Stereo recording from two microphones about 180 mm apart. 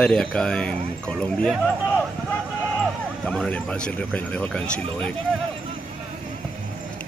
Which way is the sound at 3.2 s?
5° left (ahead or behind).